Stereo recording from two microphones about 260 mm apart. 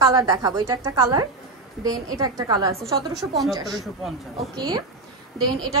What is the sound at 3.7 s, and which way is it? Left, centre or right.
Speech, centre.